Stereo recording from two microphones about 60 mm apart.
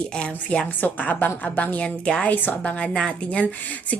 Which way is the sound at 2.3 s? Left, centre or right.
Left.